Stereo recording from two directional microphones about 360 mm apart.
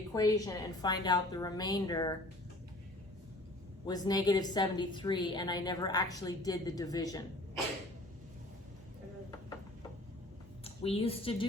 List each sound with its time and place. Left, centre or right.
0.1 s a woman's voice: centre
3.8 s a woman's voice: centre
10.6 s a woman's voice: centre